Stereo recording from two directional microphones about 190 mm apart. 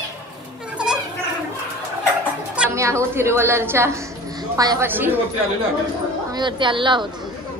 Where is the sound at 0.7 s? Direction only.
5° right (ahead or behind).